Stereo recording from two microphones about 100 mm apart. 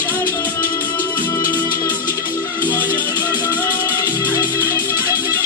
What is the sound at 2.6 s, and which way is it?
Music, 20° left (ahead or behind).